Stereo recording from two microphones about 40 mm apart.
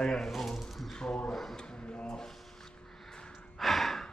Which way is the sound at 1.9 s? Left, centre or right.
Left.